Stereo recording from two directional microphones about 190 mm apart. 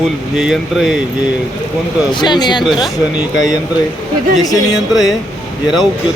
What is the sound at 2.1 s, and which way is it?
Speech, 25° left (ahead or behind).